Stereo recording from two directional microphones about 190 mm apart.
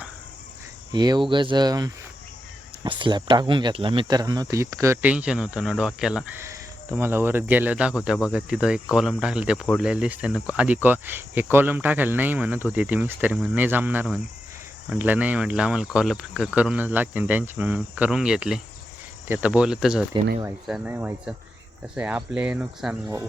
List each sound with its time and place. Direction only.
0.9 s speech: 20° right (ahead or behind)